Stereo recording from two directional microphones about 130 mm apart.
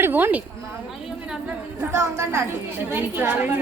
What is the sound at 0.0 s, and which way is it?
Speech, 15° right (ahead or behind).